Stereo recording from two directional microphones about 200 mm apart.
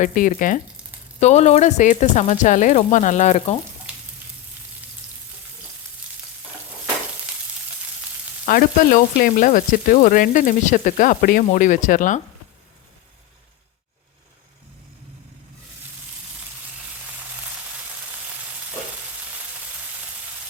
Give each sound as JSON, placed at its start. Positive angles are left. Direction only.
{"t": 0.0, "sound": "speech", "side_deg": 40}
{"t": 8.4, "sound": "speech", "side_deg": 45}